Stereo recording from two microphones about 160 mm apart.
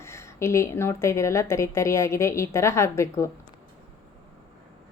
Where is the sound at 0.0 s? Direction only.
15° left (ahead or behind).